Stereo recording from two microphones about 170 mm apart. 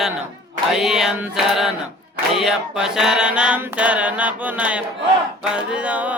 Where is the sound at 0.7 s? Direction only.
Centre (ahead or behind).